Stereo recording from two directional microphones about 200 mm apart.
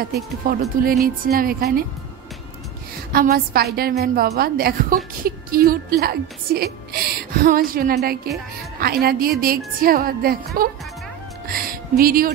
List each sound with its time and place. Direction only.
0.4 s a woman's voice: 45° right (ahead or behind)
3.1 s a woman's voice: 50° right (ahead or behind)
11.4 s music: 45° right (ahead or behind)